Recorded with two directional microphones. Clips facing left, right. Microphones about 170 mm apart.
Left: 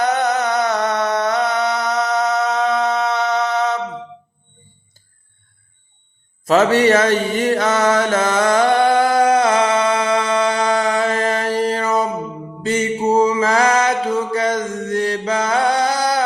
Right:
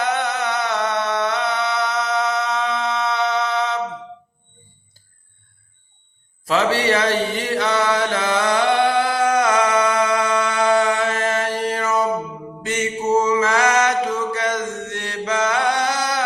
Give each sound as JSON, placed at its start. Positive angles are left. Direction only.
{"t": 0.0, "sound": "a sound", "side_deg": 40}
{"t": 6.4, "sound": "mantra", "side_deg": 45}
{"t": 9.3, "sound": "music", "side_deg": 30}
{"t": 12.6, "sound": "mantra", "side_deg": 30}